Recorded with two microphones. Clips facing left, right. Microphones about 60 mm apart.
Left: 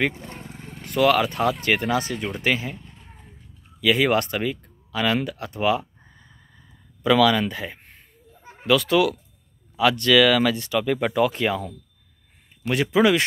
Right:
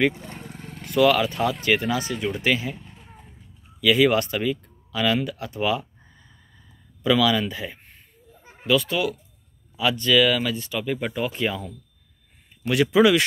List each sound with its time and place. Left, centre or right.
0.2 s roaring cats: centre
0.9 s speech: left
2.1 s speech: centre
2.4 s speech: left
2.7 s a sound: centre
3.8 s speech: left
6.0 s a sound: left
7.0 s speech: left
8.6 s speech: left
9.8 s speech: left
12.6 s speech: left